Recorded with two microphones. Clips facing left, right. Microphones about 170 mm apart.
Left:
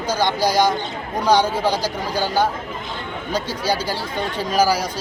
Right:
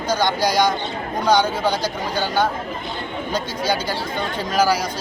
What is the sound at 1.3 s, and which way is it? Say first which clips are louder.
Speech: left 1 dB; 30° left (ahead or behind).